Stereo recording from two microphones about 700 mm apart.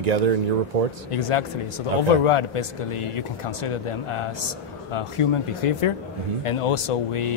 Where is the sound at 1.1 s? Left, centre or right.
Left.